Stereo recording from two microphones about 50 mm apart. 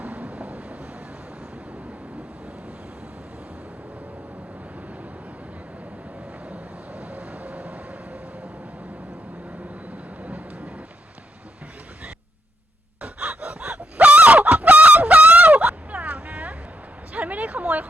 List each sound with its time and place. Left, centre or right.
0.0 s vehicle: right
6.5 s vehicle: right
13.0 s gasp: right
13.7 s chicken: right
15.4 s a sound: right